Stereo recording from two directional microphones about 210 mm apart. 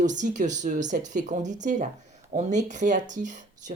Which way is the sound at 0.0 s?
35° right (ahead or behind).